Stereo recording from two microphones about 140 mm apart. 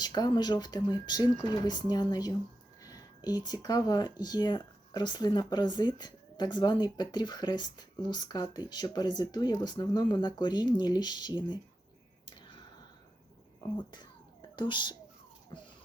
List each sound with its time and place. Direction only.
0.0 s speech: 30° left (ahead or behind)
13.6 s a child's voice: 30° left (ahead or behind)